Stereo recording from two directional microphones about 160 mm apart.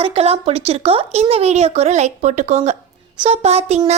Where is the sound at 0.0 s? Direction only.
40° right (ahead or behind).